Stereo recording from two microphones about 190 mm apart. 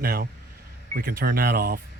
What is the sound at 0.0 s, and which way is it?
Speech, 50° right (ahead or behind).